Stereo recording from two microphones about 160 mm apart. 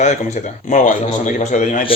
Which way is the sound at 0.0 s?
45° left (ahead or behind).